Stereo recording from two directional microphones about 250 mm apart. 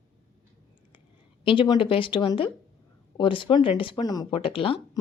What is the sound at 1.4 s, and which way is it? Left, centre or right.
Speech, centre.